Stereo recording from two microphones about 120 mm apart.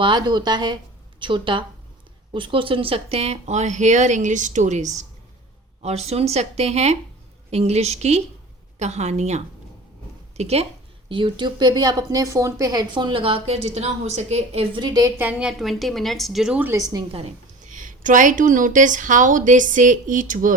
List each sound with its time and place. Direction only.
0.0 s a woman's voice: 40° right (ahead or behind); by 5.0 s 80° right
5.8 s a woman's voice: 60° right (ahead or behind)
11.1 s a woman's voice: 40° right (ahead or behind)
12.9 s a woman's voice: 40° right (ahead or behind)
14.8 s a woman's voice: 35° right (ahead or behind)
15.2 s a woman's voice: 10° right (ahead or behind)
16.6 s a woman's voice: 15° right (ahead or behind)
17.1 s a woman's voice: 55° right (ahead or behind)
17.6 s a woman's voice: 90° right